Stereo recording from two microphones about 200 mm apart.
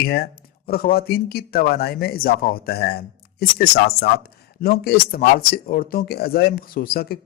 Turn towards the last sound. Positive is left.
turn(degrees=50)  # may be behind; listen again after turning